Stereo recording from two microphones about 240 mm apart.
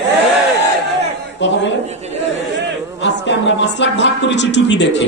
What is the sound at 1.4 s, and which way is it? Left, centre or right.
Speech, left.